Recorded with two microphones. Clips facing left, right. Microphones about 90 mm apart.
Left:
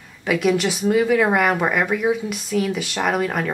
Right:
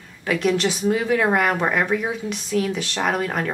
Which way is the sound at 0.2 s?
5° left (ahead or behind).